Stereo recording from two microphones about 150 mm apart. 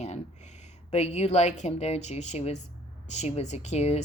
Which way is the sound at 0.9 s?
45° left (ahead or behind).